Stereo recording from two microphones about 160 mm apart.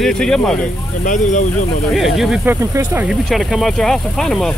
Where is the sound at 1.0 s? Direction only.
50° left (ahead or behind).